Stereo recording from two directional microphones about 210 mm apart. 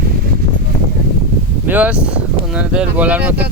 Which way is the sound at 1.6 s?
5° right (ahead or behind).